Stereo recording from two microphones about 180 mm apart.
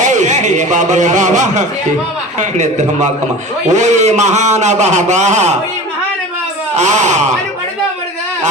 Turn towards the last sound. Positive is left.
turn(degrees=-40)  # may be behind; listen again after turning